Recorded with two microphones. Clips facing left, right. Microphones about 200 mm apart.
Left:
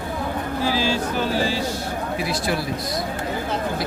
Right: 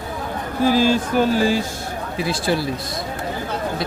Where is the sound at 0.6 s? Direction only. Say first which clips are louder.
Right 7 dB; 50° right (ahead or behind).